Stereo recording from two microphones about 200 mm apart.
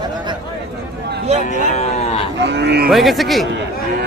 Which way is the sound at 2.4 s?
60° right (ahead or behind).